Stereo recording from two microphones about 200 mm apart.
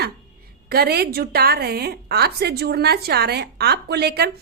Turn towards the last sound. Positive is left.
turn(degrees=-55)  # may be behind; listen again after turning